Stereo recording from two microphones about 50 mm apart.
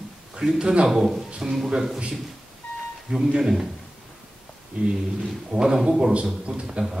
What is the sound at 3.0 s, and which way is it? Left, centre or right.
Speech, centre.